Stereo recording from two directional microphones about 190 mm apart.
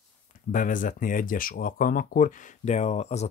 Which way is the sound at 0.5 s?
45° left (ahead or behind).